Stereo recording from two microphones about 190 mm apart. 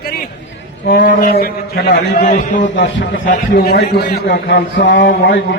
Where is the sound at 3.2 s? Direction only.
50° left (ahead or behind).